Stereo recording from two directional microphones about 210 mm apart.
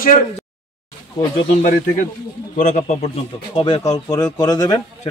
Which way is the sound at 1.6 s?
40° left (ahead or behind).